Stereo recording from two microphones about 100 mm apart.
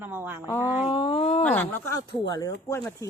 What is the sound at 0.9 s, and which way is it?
Speech, 60° left (ahead or behind).